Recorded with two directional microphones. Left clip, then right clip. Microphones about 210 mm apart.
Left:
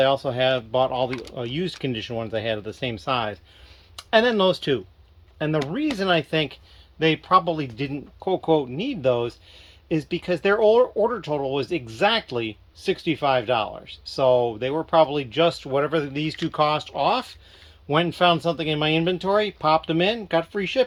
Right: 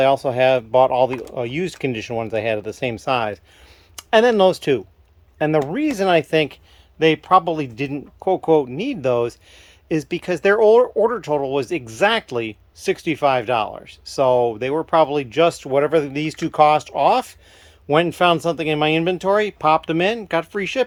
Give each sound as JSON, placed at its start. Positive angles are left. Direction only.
{"t": 0.0, "sound": "speech", "side_deg": -20}